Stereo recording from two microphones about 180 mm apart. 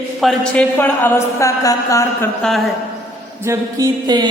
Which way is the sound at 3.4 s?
15° right (ahead or behind).